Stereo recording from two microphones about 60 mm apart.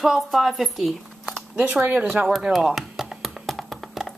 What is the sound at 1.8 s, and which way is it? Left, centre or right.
Speech, right.